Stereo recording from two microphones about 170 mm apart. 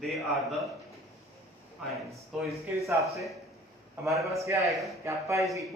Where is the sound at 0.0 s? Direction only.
Centre (ahead or behind).